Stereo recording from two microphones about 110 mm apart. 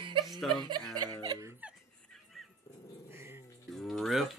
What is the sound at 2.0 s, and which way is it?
Dog, centre (ahead or behind).